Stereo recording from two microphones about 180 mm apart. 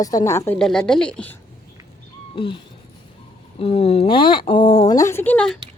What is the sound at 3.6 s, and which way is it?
Speech, 30° left (ahead or behind).